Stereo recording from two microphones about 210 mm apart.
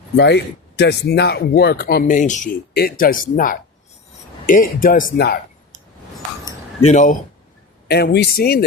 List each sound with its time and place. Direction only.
0.2 s speech: 55° left (ahead or behind)
6.8 s speech: 35° left (ahead or behind)
7.9 s speech: 50° left (ahead or behind)